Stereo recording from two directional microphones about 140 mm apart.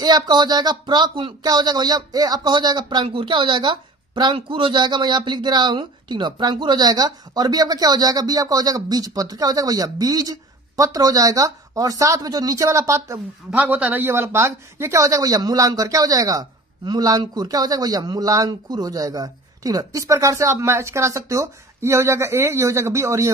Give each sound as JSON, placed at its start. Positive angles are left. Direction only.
{"t": 0.0, "sound": "speech", "side_deg": -30}
{"t": 13.5, "sound": "speech", "side_deg": -10}